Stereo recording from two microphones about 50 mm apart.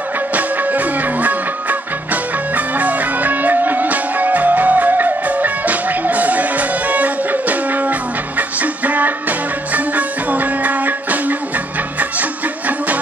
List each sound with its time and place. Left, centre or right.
0.3 s music: right